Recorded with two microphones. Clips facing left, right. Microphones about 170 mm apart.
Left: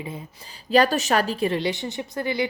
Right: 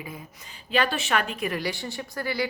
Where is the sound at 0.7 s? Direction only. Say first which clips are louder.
Left 6 dB; 40° left (ahead or behind); by 2.4 s 20° left (ahead or behind).